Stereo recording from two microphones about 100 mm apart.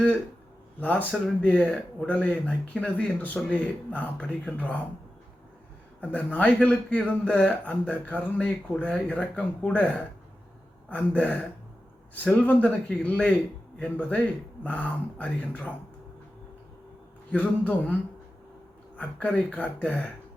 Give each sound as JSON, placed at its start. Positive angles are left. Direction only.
{"t": 0.8, "sound": "speech", "side_deg": 15}
{"t": 6.0, "sound": "speech", "side_deg": 15}
{"t": 17.3, "sound": "speech", "side_deg": 15}
{"t": 18.9, "sound": "speech", "side_deg": 10}